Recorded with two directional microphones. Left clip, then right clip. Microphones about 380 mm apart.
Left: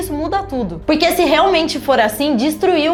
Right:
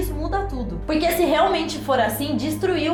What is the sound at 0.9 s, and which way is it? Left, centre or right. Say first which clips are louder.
A woman's voice: left 6 dB; left.